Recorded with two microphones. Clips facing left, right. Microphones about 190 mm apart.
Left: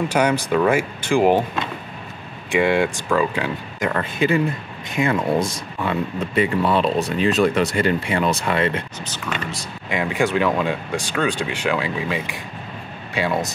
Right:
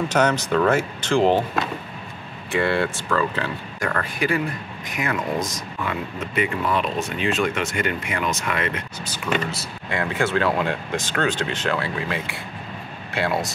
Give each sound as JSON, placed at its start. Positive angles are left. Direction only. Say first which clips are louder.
{"t": 0.1, "sound": "speech", "louder": "even", "side_deg": 10}
{"t": 2.5, "sound": "speech", "louder": "left 4 dB", "side_deg": 15}
{"t": 9.0, "sound": "speech", "louder": "right 3 dB", "side_deg": -5}
{"t": 9.8, "sound": "speech", "louder": "left 3 dB", "side_deg": 15}